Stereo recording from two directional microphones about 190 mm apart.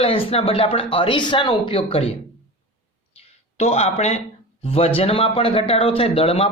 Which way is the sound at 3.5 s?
35° left (ahead or behind).